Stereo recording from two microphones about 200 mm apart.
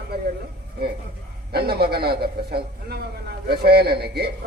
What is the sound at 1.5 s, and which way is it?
Speech, 50° right (ahead or behind).